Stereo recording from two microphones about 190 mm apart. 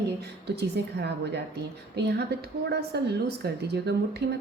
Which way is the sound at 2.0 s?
60° right (ahead or behind).